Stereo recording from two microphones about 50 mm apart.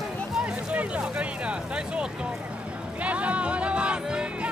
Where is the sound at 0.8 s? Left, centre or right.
Right.